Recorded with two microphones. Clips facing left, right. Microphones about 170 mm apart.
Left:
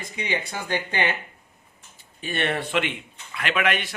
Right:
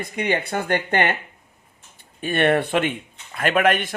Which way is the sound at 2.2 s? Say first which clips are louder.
Right 8 dB; 50° right (ahead or behind).